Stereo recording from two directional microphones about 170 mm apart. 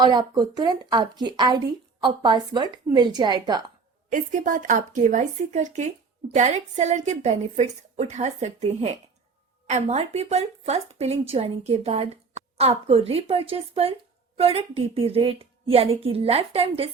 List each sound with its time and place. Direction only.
0.0 s a woman's voice: 25° right (ahead or behind)
4.1 s speech: 50° right (ahead or behind); by 16.9 s 35° right (ahead or behind)